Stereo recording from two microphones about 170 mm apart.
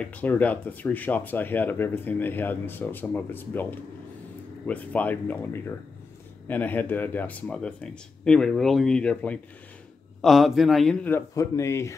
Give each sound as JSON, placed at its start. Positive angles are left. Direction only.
{"t": 0.0, "sound": "speech", "side_deg": 10}
{"t": 4.6, "sound": "a man's voice", "side_deg": 10}
{"t": 11.1, "sound": "speech", "side_deg": 15}